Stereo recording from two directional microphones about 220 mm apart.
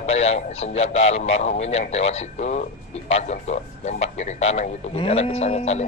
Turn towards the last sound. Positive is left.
turn(degrees=30)  # may be behind; listen again after turning